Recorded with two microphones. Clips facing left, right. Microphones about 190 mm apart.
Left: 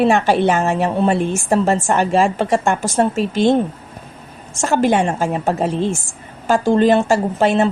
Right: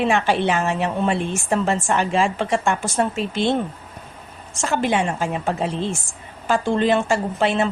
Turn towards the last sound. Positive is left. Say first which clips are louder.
# left 5 dB
turn(degrees=40)  # may be behind; listen again after turning